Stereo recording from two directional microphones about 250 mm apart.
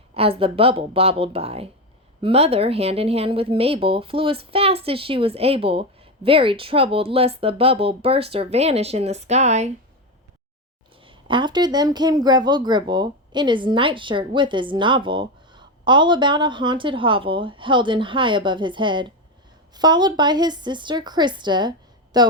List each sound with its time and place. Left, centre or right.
0.1 s a woman's voice: right
11.0 s a woman's voice: centre